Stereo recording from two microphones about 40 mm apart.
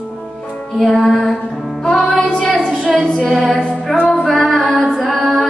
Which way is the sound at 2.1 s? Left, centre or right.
Left.